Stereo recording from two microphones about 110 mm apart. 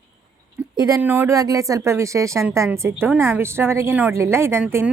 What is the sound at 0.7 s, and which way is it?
Speech, 30° right (ahead or behind).